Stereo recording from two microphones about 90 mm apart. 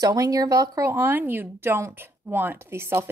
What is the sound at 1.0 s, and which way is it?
A woman's voice, 20° right (ahead or behind).